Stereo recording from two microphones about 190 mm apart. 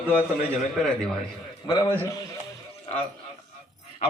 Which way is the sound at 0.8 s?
5° left (ahead or behind).